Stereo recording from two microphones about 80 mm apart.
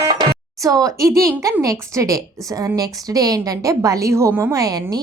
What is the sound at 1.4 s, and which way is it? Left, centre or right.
A woman's voice, right.